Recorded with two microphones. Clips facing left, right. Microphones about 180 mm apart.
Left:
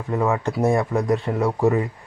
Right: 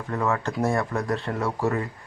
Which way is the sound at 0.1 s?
15° left (ahead or behind).